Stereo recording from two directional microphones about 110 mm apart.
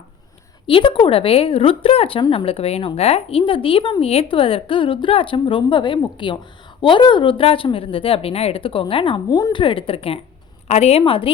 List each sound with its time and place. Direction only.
0.7 s a woman's voice: 50° left (ahead or behind)
4.0 s speech: 60° left (ahead or behind)
10.7 s a woman's voice: 75° left (ahead or behind); by 11.3 s 55° left (ahead or behind)